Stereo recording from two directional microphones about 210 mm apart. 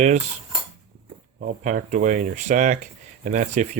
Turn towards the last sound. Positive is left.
turn(degrees=-35)  # may be behind; listen again after turning